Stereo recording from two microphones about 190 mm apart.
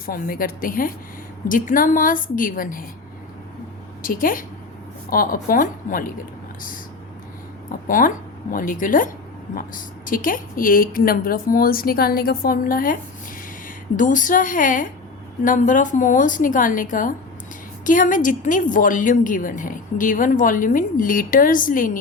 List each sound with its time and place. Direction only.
0.0 s a woman's voice: 50° left (ahead or behind)
4.0 s a woman's voice: 45° left (ahead or behind)
7.9 s a woman's voice: 45° left (ahead or behind)